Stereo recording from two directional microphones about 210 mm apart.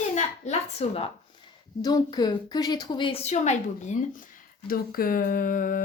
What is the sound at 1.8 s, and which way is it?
Speech, 20° left (ahead or behind).